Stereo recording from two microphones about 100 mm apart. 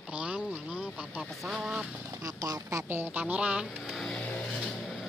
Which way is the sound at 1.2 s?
Centre (ahead or behind).